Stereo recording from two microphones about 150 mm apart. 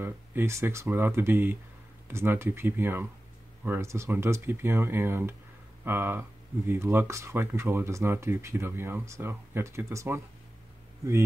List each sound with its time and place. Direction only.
0.0 s speech: 15° right (ahead or behind)